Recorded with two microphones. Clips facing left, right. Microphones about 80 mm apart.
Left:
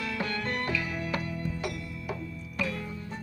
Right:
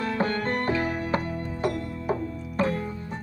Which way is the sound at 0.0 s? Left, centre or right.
Right.